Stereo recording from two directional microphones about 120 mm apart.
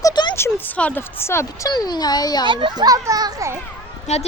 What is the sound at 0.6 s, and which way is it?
A woman's voice, 15° left (ahead or behind).